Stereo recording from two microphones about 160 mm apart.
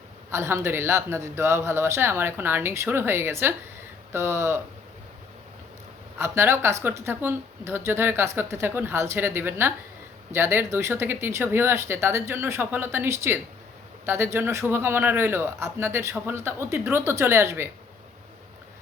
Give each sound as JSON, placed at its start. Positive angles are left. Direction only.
{"t": 0.3, "sound": "a woman's voice", "side_deg": -15}
{"t": 6.1, "sound": "a woman's voice", "side_deg": -15}